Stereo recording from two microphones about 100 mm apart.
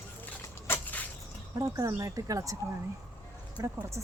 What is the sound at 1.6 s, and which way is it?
Speech, 35° right (ahead or behind).